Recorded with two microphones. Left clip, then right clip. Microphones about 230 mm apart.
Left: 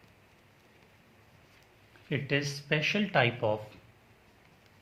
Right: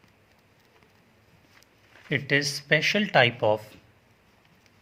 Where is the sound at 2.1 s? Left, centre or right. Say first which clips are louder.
Right 7 dB; right.